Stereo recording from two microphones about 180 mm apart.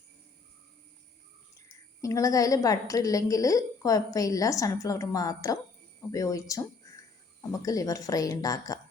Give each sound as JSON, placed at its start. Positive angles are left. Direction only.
{"t": 1.6, "sound": "a woman's voice", "side_deg": 15}